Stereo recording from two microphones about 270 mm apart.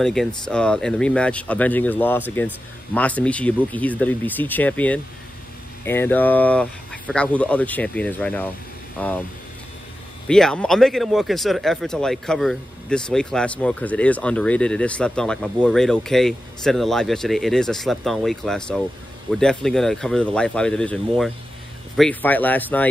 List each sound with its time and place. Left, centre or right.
0.0 s speech: centre
10.2 s speech: centre